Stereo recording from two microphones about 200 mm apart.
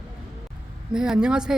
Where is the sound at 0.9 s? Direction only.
5° right (ahead or behind).